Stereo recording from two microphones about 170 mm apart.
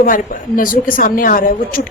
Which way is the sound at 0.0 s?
55° left (ahead or behind).